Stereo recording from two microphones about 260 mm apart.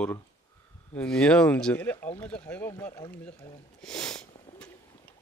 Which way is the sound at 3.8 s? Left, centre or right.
Centre.